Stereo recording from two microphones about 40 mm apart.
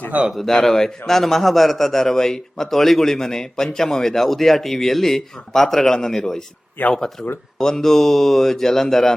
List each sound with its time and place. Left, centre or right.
0.1 s speech: right
0.5 s a man's voice: centre